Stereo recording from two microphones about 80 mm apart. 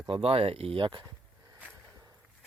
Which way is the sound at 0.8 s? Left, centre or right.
Right.